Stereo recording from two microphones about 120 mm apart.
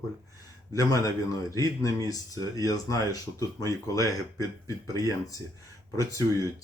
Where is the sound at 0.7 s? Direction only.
30° left (ahead or behind).